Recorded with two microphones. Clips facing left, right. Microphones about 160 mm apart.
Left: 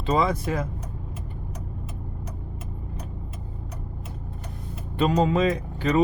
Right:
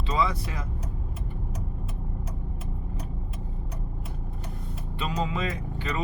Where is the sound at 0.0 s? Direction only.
50° left (ahead or behind).